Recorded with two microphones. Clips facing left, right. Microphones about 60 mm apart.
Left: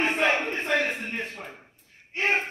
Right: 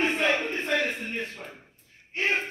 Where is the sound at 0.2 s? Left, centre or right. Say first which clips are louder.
Left 1 dB; left.